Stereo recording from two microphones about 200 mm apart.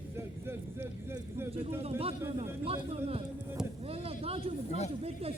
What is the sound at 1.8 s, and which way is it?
Speech, 30° right (ahead or behind).